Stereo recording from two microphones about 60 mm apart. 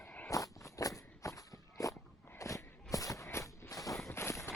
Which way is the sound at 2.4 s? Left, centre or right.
Left.